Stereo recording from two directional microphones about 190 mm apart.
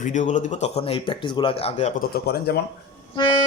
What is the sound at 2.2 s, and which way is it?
Speech, 55° left (ahead or behind).